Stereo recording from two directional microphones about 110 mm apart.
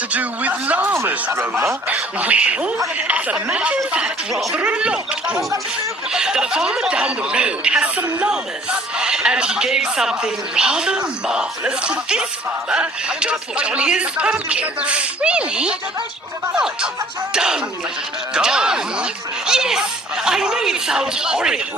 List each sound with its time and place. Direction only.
0.1 s speech: 15° right (ahead or behind)
0.9 s speech: 25° right (ahead or behind)
1.9 s speech: 15° right (ahead or behind)
17.3 s speech: 5° right (ahead or behind)